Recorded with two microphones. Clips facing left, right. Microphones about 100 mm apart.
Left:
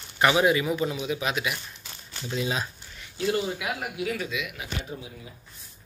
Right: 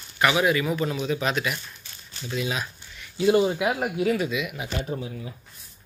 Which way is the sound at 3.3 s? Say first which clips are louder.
Right 8 dB; 25° right (ahead or behind).